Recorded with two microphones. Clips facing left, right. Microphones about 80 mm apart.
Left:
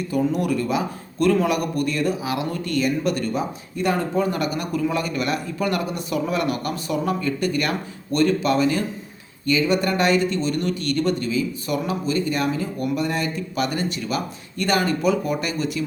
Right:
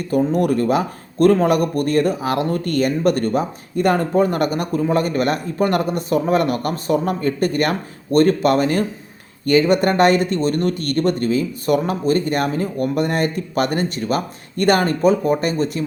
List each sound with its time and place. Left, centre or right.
0.1 s a man's voice: right